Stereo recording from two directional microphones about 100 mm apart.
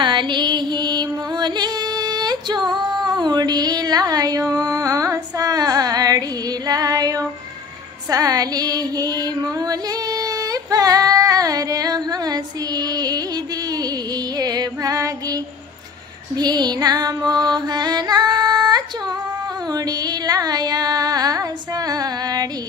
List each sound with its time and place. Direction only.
0.0 s music: 50° right (ahead or behind)
6.7 s female singing: 40° right (ahead or behind)
14.4 s female singing: 40° right (ahead or behind)
16.3 s music: 45° right (ahead or behind)
19.7 s a sound: 40° right (ahead or behind)